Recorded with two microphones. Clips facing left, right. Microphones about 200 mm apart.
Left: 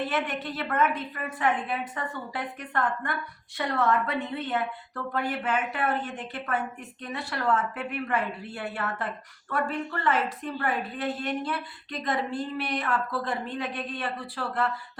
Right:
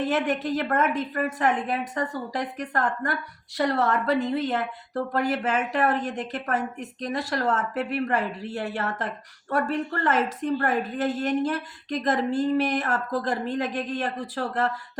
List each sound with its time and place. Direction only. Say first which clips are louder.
0.1 s a woman's voice: right 6 dB; 45° right (ahead or behind)